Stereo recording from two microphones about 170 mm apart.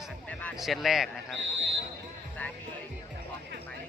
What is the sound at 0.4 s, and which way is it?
Speech, centre (ahead or behind).